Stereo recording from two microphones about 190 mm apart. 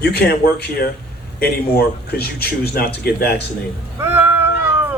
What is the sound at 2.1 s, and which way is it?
A man's voice, 55° left (ahead or behind).